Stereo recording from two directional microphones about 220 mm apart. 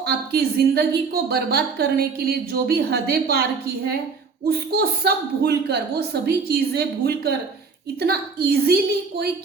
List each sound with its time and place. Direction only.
0.0 s a woman's voice: 45° right (ahead or behind)
4.4 s a woman's voice: 45° right (ahead or behind)